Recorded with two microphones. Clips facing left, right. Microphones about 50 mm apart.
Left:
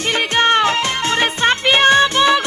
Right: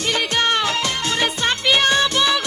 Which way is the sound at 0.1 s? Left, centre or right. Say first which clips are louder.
Left 5 dB; left.